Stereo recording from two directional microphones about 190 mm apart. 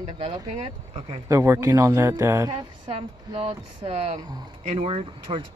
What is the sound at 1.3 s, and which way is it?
Speech, 15° right (ahead or behind).